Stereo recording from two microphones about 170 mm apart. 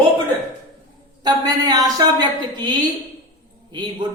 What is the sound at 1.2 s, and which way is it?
A woman's voice, 25° right (ahead or behind).